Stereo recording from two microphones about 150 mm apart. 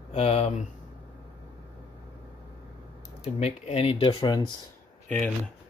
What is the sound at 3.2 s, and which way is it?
Speech, 45° left (ahead or behind).